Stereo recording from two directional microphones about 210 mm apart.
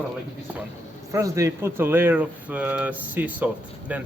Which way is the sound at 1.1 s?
15° right (ahead or behind).